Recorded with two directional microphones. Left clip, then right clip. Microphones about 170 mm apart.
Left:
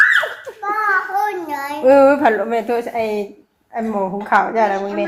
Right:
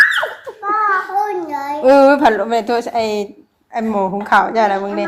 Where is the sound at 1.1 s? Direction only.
5° left (ahead or behind).